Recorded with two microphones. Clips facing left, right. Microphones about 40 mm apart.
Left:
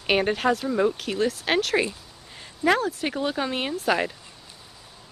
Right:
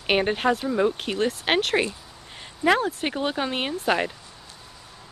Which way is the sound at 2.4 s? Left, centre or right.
Centre.